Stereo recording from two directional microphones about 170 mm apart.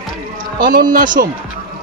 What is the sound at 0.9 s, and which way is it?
Speech, 55° right (ahead or behind).